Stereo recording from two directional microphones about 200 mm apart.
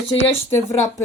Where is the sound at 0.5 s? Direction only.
15° left (ahead or behind).